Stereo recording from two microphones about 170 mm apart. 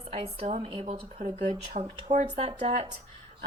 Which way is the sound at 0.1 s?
40° right (ahead or behind).